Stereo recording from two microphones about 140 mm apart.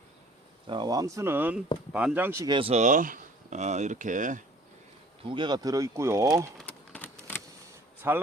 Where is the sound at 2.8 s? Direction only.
65° right (ahead or behind).